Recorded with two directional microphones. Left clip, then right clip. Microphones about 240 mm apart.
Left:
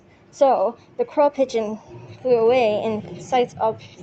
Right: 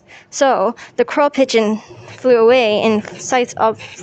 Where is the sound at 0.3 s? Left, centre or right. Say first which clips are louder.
Right 3 dB; right.